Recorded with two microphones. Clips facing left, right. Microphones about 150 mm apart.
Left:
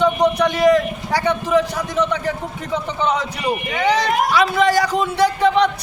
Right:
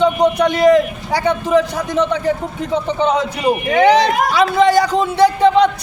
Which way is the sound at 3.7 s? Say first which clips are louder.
Right 8 dB; 65° right (ahead or behind).